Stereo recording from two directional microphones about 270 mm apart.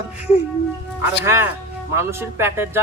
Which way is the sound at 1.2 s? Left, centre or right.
Centre.